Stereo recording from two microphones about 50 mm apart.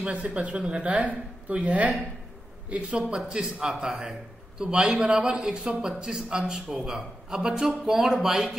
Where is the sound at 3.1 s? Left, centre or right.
Centre.